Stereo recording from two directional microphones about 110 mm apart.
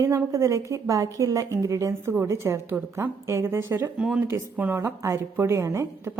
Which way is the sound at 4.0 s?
10° right (ahead or behind).